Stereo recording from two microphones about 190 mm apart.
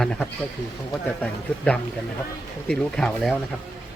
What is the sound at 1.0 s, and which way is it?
Speech, 5° left (ahead or behind).